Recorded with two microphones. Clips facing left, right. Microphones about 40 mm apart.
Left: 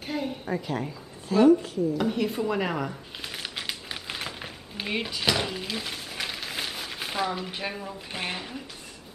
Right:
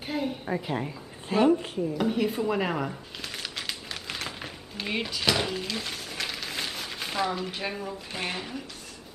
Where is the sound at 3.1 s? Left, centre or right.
Centre.